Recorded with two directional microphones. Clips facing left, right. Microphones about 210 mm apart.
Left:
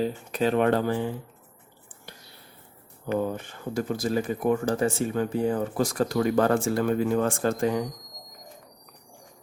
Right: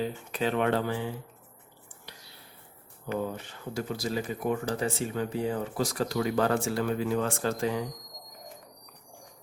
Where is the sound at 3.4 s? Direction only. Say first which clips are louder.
Left 5 dB; 50° left (ahead or behind).